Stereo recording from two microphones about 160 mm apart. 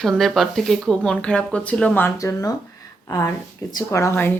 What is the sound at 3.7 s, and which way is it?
Speech, 20° left (ahead or behind).